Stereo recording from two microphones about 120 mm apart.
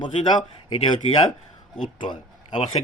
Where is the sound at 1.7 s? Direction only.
45° left (ahead or behind).